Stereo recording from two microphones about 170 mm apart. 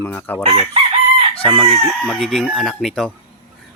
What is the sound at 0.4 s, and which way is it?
Chicken, 35° right (ahead or behind).